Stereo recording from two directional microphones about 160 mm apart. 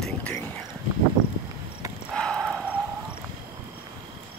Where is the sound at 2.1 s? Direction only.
5° left (ahead or behind).